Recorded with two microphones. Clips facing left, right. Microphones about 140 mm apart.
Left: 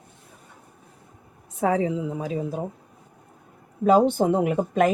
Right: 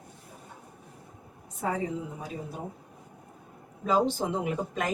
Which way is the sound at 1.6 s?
90° left.